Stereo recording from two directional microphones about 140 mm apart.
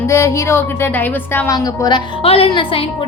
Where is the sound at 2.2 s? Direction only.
40° left (ahead or behind).